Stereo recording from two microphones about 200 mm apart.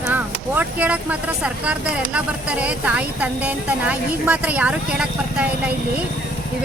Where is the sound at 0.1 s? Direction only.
10° right (ahead or behind).